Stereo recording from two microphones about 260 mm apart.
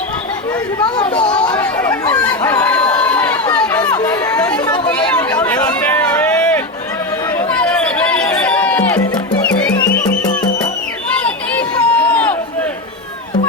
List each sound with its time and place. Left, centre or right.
0.9 s speech: centre
1.4 s chatter: centre
7.3 s music: centre
11.1 s run: centre